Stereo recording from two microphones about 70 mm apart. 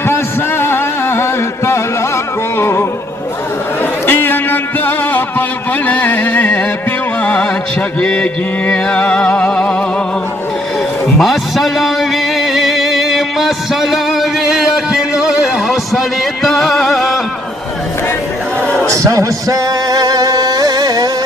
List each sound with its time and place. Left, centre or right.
0.0 s music: left
4.0 s music: left
8.0 s music: centre
11.1 s music: centre
16.4 s music: centre
18.9 s music: right